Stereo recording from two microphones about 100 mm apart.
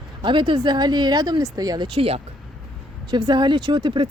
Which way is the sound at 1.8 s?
70° right (ahead or behind).